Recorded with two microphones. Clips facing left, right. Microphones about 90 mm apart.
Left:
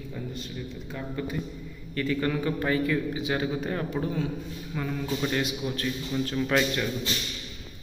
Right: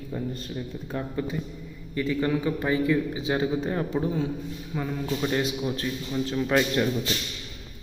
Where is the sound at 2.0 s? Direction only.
15° right (ahead or behind).